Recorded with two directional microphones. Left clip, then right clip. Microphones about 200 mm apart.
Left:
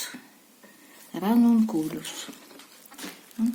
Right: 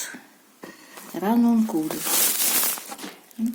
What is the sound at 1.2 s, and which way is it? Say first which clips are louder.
Speech: right 1 dB; 55° left (ahead or behind).